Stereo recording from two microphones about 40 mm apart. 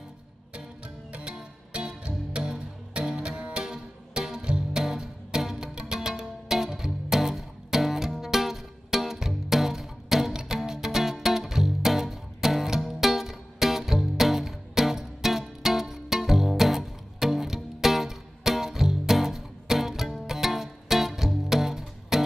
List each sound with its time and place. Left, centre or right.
1.3 s music: right